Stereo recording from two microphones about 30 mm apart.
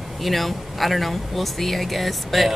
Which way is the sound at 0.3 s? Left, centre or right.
Centre.